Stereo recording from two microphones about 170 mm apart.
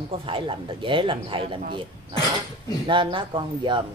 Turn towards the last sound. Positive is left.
turn(degrees=-30)  # may be behind; listen again after turning